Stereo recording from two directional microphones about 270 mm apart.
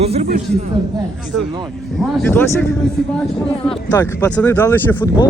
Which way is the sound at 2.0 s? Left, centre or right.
Centre.